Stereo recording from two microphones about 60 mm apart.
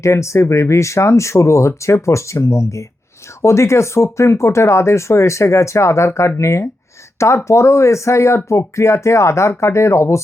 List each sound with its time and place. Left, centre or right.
0.0 s speech: left